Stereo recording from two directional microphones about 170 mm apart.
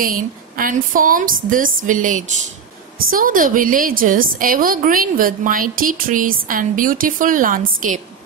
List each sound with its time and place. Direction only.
0.0 s a woman's voice: 55° right (ahead or behind)